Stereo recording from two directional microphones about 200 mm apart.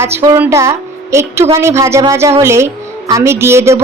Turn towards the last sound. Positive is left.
turn(degrees=-15)  # may be behind; listen again after turning